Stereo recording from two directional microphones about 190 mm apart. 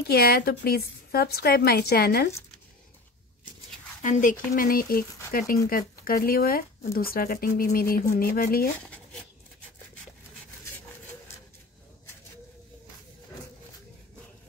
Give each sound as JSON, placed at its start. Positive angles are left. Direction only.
{"t": 0.1, "sound": "a woman's voice", "side_deg": 55}
{"t": 4.0, "sound": "speech", "side_deg": 45}
{"t": 8.8, "sound": "a sound", "side_deg": 5}